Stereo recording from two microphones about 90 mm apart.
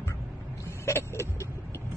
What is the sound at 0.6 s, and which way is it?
Vehicle, 30° left (ahead or behind).